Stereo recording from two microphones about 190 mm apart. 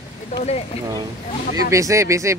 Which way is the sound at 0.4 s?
35° left (ahead or behind).